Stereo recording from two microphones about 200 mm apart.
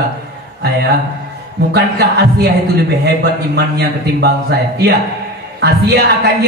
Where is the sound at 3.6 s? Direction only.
55° right (ahead or behind).